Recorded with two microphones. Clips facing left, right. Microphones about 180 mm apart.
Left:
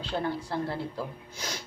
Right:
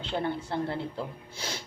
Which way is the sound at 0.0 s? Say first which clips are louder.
Even; 20° right (ahead or behind).